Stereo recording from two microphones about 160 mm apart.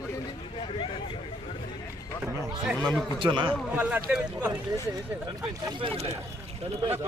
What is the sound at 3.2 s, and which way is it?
Speech, 30° right (ahead or behind).